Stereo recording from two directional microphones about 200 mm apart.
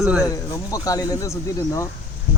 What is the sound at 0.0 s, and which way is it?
Speech, 5° right (ahead or behind).